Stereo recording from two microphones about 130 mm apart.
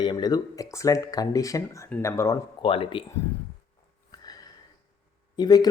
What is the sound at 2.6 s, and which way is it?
Speech, 40° left (ahead or behind).